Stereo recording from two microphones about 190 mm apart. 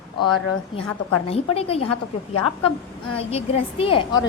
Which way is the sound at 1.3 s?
30° left (ahead or behind).